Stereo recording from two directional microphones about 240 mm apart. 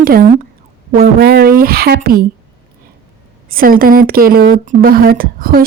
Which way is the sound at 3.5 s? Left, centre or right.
Right.